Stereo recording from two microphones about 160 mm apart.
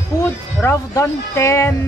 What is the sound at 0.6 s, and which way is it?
Speech, 20° left (ahead or behind).